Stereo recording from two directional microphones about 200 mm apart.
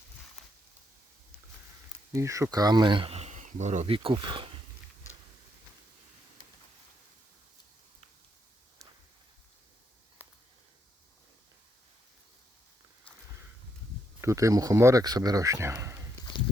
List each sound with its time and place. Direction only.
2.1 s speech: 15° right (ahead or behind)
10.2 s a sound: 10° right (ahead or behind)
14.2 s speech: 15° right (ahead or behind)